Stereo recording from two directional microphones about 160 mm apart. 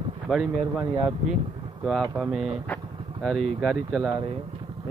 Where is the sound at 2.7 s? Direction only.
Centre (ahead or behind).